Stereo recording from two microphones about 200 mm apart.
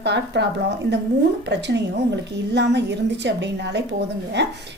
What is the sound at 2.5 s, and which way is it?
A woman's voice, 60° right (ahead or behind).